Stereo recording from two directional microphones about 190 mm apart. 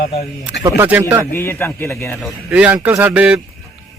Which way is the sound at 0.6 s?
10° right (ahead or behind).